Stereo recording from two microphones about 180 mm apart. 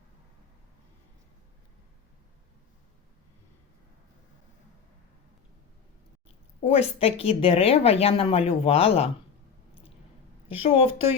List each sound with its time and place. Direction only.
6.7 s a woman's voice: 35° left (ahead or behind)
10.5 s a woman's voice: 35° left (ahead or behind)